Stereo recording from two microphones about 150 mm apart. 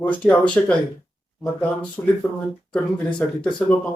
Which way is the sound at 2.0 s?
15° left (ahead or behind).